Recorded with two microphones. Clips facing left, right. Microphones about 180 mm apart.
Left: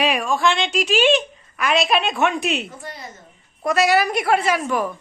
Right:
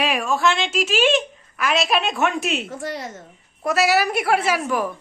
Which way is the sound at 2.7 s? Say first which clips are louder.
Right 7 dB; 90° right.